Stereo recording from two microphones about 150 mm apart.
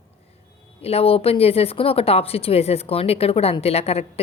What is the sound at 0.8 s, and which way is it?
Speech, 40° left (ahead or behind).